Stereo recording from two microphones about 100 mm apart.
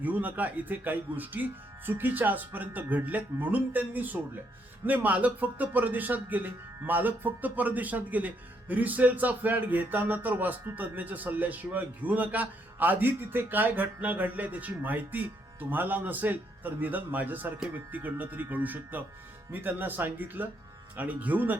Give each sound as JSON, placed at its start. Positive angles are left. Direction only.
{"t": 0.0, "sound": "a man's voice", "side_deg": -15}